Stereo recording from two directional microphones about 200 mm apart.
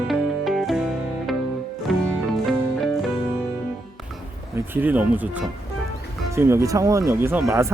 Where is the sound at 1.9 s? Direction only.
Centre (ahead or behind).